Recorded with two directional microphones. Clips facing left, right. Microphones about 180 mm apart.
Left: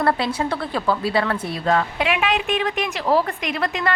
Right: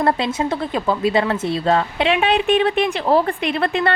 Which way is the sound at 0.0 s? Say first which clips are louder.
Right 2 dB; 20° right (ahead or behind).